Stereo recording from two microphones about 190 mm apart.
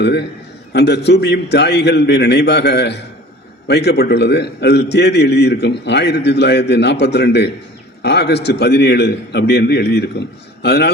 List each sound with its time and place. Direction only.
0.0 s a man's voice: 65° left (ahead or behind)